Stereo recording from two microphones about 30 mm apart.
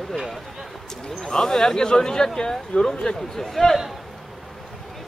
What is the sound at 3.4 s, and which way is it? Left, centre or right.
Speech, centre.